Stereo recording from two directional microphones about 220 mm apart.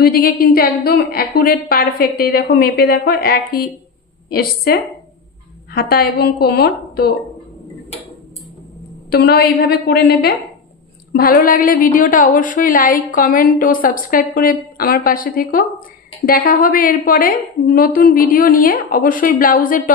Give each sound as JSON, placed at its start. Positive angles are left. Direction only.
{"t": 0.0, "sound": "a woman's voice", "side_deg": 45}
{"t": 9.1, "sound": "a woman's voice", "side_deg": 45}